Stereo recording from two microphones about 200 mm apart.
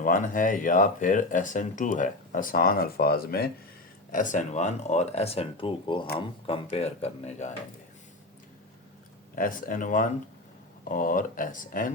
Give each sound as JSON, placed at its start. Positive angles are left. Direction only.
{"t": 0.0, "sound": "speech", "side_deg": 40}
{"t": 4.1, "sound": "speech", "side_deg": 40}
{"t": 9.3, "sound": "speech", "side_deg": 45}